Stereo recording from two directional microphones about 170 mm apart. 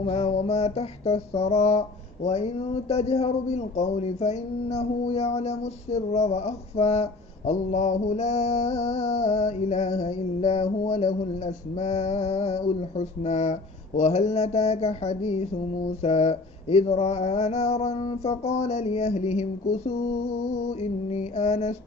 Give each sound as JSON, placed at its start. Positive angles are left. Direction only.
{"t": 0.0, "sound": "a man's voice", "side_deg": 40}